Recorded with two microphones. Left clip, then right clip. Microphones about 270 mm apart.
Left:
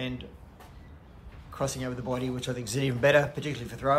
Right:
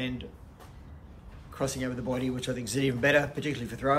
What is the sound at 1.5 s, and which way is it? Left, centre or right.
Speech, centre.